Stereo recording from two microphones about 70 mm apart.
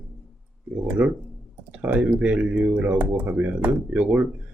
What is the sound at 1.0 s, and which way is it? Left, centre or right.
Speech, centre.